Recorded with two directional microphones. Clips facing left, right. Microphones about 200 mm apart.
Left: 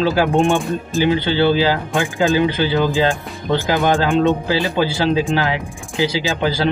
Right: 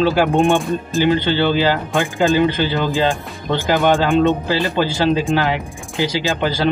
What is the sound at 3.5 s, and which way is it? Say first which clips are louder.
Speech: right 1 dB; 15° left (ahead or behind).